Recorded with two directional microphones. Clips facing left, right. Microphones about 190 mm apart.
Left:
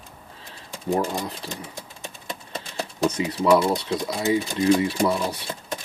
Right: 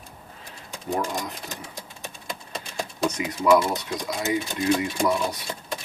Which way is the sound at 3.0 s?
30° left (ahead or behind).